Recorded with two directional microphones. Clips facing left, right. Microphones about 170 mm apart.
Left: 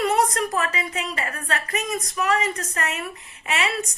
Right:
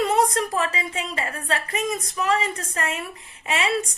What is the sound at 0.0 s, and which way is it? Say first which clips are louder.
A woman's voice: right 1 dB; 25° right (ahead or behind).